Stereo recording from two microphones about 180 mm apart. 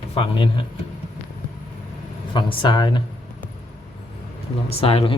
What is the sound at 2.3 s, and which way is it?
Speech, 25° left (ahead or behind).